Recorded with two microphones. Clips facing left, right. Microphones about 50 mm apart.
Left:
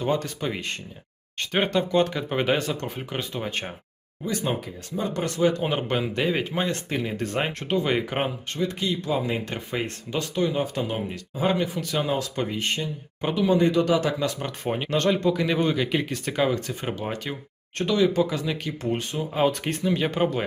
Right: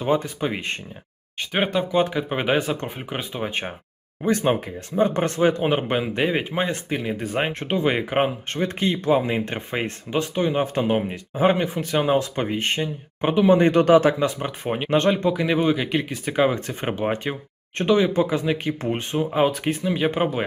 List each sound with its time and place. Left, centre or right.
0.0 s speech: centre
1.4 s speech: centre
4.2 s speech: right
8.5 s speech: right; by 16.6 s centre
16.6 s speech: right
19.5 s speech: centre